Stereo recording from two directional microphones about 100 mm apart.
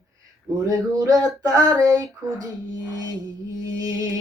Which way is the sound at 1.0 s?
40° right (ahead or behind).